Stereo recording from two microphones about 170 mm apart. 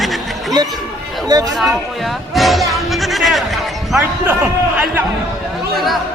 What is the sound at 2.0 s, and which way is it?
Music, centre (ahead or behind).